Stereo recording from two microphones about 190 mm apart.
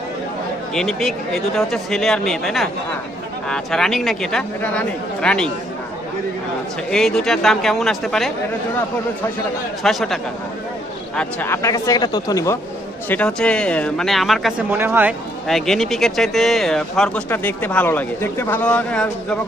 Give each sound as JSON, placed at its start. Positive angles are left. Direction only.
{"t": 0.7, "sound": "speech", "side_deg": 0}
{"t": 6.9, "sound": "speech", "side_deg": 5}
{"t": 9.8, "sound": "speech", "side_deg": 0}
{"t": 11.1, "sound": "speech", "side_deg": 10}
{"t": 13.1, "sound": "speech", "side_deg": 5}
{"t": 14.7, "sound": "speech", "side_deg": -10}
{"t": 15.4, "sound": "speech", "side_deg": 0}